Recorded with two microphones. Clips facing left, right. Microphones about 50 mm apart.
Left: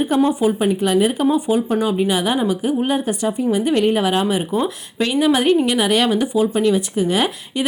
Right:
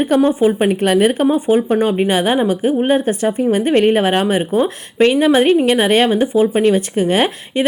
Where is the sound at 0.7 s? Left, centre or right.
Right.